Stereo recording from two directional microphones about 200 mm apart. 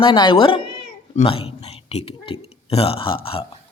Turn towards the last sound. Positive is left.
turn(degrees=30)  # may be behind; listen again after turning